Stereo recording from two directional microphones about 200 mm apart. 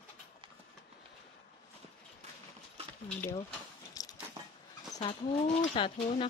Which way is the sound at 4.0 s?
15° left (ahead or behind).